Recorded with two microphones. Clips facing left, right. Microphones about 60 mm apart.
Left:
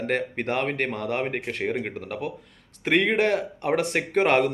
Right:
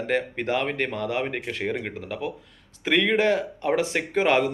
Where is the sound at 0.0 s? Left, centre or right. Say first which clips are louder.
Right 1 dB; left.